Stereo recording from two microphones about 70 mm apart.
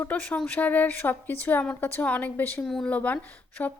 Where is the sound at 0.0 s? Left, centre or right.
Left.